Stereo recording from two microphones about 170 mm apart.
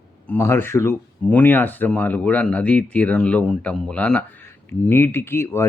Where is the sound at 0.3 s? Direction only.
15° left (ahead or behind).